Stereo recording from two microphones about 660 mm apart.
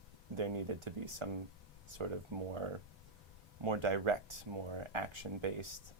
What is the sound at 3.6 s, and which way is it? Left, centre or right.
Speech, right.